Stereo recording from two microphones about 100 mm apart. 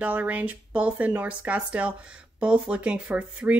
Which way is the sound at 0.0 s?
15° right (ahead or behind).